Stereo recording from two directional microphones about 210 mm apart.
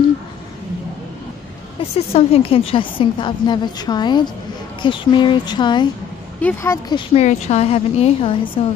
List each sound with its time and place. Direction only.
2.0 s a woman's voice: 30° left (ahead or behind)